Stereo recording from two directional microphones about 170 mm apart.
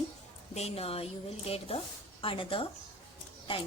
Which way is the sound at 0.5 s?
35° left (ahead or behind).